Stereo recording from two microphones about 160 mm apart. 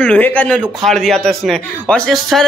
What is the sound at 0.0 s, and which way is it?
A man's voice, 10° left (ahead or behind).